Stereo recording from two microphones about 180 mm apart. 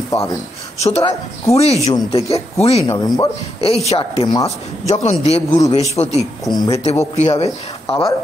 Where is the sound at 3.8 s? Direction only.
35° left (ahead or behind).